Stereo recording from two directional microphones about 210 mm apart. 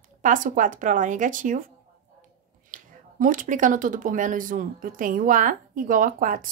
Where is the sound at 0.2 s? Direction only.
40° right (ahead or behind).